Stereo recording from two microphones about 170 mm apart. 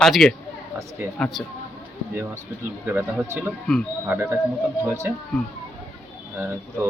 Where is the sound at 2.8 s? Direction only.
10° right (ahead or behind).